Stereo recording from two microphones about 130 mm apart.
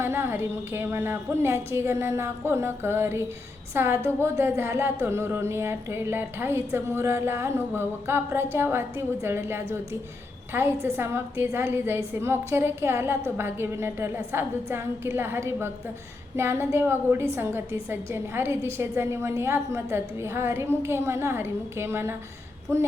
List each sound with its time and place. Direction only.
0.0 s a woman's voice: 20° right (ahead or behind)